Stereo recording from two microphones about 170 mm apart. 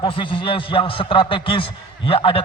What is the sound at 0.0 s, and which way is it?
A man's voice, 30° left (ahead or behind).